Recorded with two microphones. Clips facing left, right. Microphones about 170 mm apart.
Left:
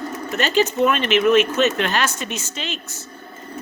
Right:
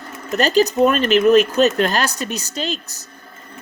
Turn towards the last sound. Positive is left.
turn(degrees=-35)  # may be behind; listen again after turning